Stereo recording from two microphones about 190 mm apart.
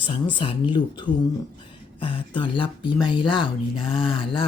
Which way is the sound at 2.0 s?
25° left (ahead or behind).